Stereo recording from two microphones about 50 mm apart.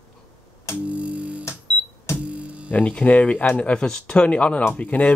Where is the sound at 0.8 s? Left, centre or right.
Right.